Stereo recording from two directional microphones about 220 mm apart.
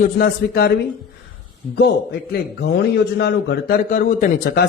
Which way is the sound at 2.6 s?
50° left (ahead or behind).